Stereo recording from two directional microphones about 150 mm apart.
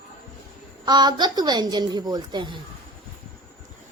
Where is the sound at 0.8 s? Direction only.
30° right (ahead or behind).